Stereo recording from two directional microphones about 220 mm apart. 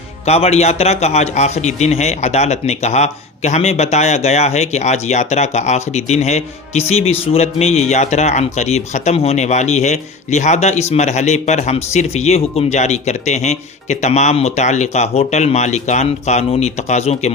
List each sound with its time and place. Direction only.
0.3 s a man's voice: 30° left (ahead or behind)